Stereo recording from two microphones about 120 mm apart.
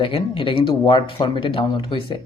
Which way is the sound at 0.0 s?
45° left (ahead or behind).